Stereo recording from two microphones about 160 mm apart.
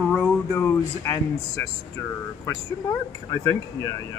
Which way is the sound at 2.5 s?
25° left (ahead or behind).